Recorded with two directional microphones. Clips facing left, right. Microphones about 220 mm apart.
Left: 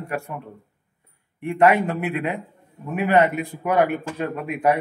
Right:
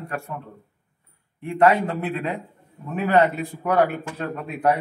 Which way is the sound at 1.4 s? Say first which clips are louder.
Left 1 dB; 15° left (ahead or behind).